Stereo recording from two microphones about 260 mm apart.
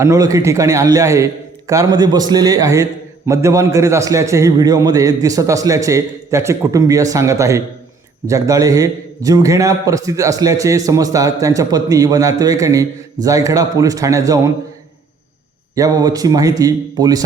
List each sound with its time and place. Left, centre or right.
0.0 s a man's voice: centre
15.7 s a man's voice: centre